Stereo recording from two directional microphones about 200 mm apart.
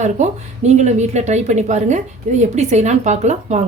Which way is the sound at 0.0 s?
35° right (ahead or behind).